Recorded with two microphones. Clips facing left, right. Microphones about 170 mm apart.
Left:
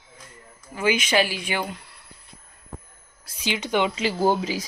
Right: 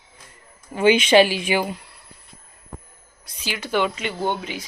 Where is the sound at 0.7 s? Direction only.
30° right (ahead or behind).